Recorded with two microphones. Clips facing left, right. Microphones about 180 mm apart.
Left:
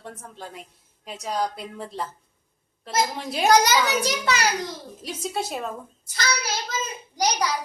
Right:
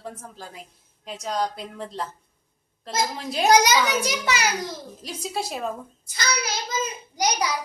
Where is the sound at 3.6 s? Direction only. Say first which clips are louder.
Even; 10° right (ahead or behind).